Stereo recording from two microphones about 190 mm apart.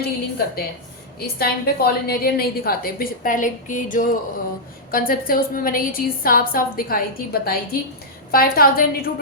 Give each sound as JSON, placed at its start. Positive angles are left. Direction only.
{"t": 0.0, "sound": "a woman's voice", "side_deg": 55}